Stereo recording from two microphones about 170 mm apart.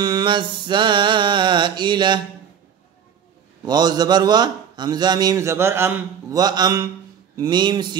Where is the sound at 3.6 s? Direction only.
25° right (ahead or behind).